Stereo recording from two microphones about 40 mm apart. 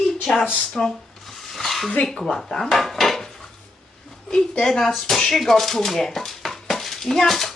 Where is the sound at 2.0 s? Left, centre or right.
Centre.